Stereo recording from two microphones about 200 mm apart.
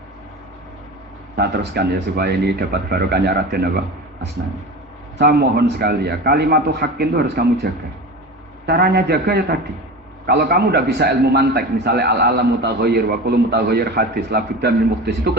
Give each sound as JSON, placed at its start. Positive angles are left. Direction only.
{"t": 1.4, "sound": "a man's voice", "side_deg": -55}